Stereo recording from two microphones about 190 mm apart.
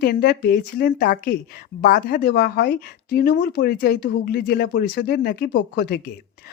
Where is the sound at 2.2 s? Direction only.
60° left (ahead or behind).